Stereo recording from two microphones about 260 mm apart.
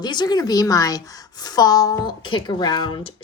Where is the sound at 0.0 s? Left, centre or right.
Centre.